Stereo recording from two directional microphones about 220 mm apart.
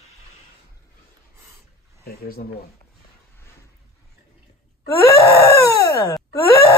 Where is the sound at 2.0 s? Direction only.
45° left (ahead or behind).